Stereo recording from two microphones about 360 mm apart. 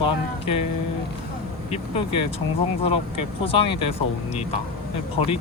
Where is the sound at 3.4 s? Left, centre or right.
Centre.